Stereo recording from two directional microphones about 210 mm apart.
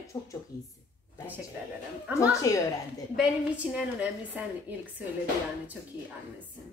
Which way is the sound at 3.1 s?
5° right (ahead or behind).